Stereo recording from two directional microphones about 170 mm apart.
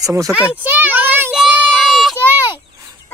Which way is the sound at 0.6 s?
10° right (ahead or behind).